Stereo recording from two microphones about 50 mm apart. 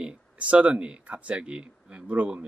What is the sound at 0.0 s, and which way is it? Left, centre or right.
Speech, right.